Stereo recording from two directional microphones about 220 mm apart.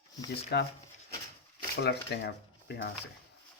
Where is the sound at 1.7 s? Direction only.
50° left (ahead or behind).